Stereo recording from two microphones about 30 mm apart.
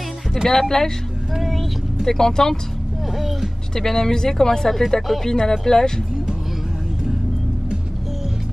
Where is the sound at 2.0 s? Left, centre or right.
Centre.